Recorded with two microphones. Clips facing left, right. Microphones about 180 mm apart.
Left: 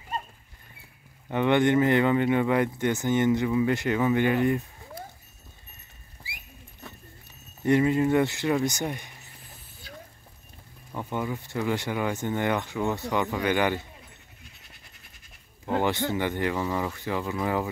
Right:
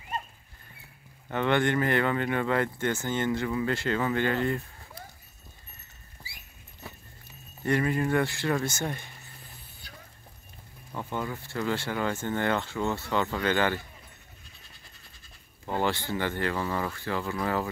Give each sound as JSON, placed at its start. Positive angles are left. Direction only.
{"t": 1.3, "sound": "speech", "side_deg": 15}
{"t": 7.6, "sound": "speech", "side_deg": 20}
{"t": 10.9, "sound": "speech", "side_deg": 15}
{"t": 15.6, "sound": "speech", "side_deg": 15}